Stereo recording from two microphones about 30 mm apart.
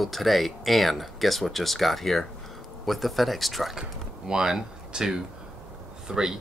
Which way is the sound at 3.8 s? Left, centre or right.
Right.